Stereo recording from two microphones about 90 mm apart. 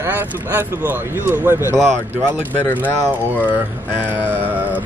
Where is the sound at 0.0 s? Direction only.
25° right (ahead or behind).